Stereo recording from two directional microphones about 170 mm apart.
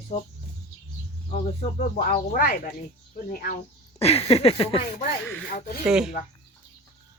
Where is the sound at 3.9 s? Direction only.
35° left (ahead or behind).